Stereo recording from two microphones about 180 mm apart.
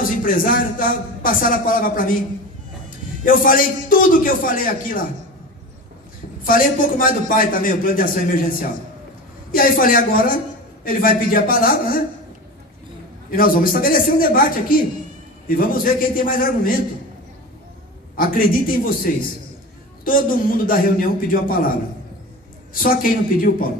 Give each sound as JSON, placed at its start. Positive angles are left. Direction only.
{"t": 0.2, "sound": "a man's voice", "side_deg": 50}
{"t": 3.3, "sound": "a man's voice", "side_deg": 50}
{"t": 6.4, "sound": "a man's voice", "side_deg": 50}
{"t": 9.5, "sound": "a man's voice", "side_deg": 50}
{"t": 13.3, "sound": "a man's voice", "side_deg": 50}
{"t": 18.1, "sound": "a man's voice", "side_deg": 50}
{"t": 20.1, "sound": "a man's voice", "side_deg": 50}
{"t": 22.8, "sound": "a man's voice", "side_deg": 50}